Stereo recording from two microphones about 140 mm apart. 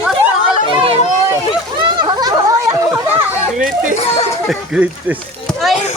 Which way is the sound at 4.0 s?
50° left (ahead or behind).